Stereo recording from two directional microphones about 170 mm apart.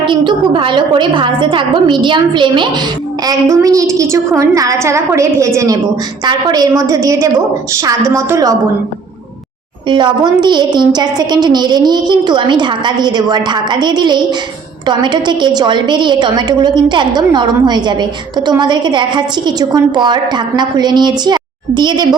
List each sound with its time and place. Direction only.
0.0 s a woman's voice: 30° right (ahead or behind)
9.9 s a woman's voice: 25° right (ahead or behind)